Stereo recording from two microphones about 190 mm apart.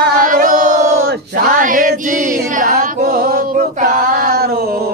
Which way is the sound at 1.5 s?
45° right (ahead or behind).